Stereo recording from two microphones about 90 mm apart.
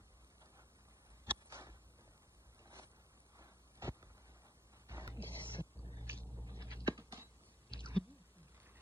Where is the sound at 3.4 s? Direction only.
35° right (ahead or behind).